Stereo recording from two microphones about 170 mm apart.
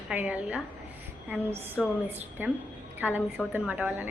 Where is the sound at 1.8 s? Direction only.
Centre (ahead or behind).